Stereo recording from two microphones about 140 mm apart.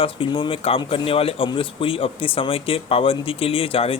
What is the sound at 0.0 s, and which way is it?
Speech, 40° left (ahead or behind).